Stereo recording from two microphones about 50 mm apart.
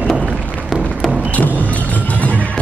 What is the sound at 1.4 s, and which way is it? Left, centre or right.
Music, right.